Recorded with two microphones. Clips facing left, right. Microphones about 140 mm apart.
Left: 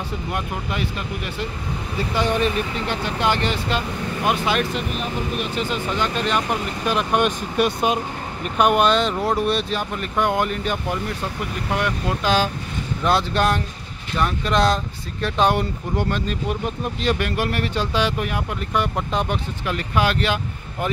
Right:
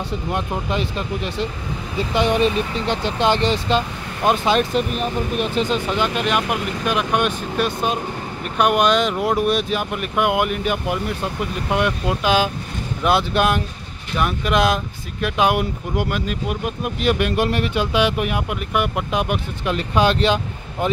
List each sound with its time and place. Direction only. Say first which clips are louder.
0.3 s speech: right 4 dB; 25° right (ahead or behind)
5.7 s speech: right 3 dB; 15° right (ahead or behind)
19.6 s speech: right 4 dB; 20° right (ahead or behind)